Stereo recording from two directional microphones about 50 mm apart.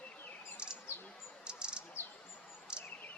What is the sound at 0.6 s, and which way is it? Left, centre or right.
Chirp, centre.